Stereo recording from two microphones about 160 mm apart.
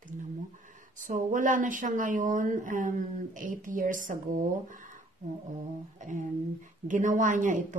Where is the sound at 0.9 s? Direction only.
55° right (ahead or behind).